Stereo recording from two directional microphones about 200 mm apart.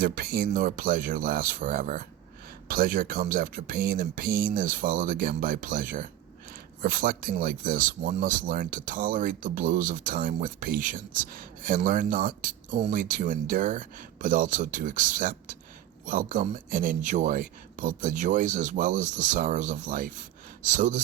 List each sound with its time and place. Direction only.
0.0 s speech: 45° right (ahead or behind)